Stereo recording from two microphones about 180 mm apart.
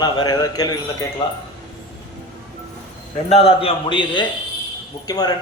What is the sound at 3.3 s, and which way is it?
A man's voice, 30° left (ahead or behind).